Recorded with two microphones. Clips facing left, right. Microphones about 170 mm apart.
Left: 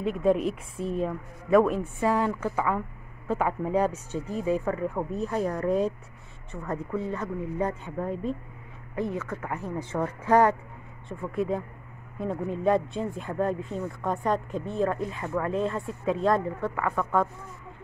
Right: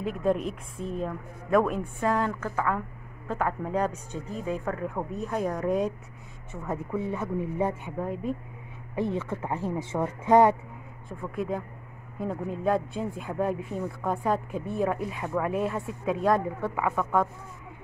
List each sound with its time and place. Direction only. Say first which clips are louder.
0.0 s speech: left 3 dB; centre (ahead or behind); by 7.9 s 20° right (ahead or behind)
8.0 s speech: left 1 dB; 5° right (ahead or behind)
8.9 s speech: right 1 dB; 25° right (ahead or behind)
11.1 s speech: left 3 dB; centre (ahead or behind)